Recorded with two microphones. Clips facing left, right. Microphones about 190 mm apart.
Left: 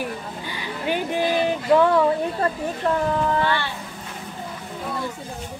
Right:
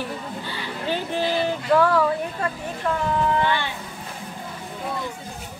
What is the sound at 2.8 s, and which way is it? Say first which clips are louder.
Speech: left 3 dB; 40° left (ahead or behind).